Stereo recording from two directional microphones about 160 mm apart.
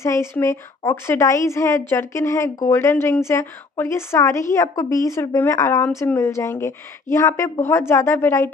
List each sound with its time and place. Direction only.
0.0 s a woman's voice: 15° left (ahead or behind)